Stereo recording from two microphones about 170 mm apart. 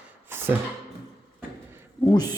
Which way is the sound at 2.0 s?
20° left (ahead or behind).